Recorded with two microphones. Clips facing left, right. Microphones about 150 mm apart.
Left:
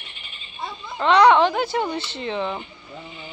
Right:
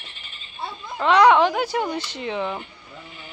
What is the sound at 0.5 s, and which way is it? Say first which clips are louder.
Speech: even; 5° right (ahead or behind).